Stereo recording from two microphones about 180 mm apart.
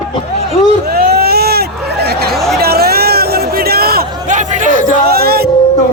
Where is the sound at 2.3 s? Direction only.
Centre (ahead or behind).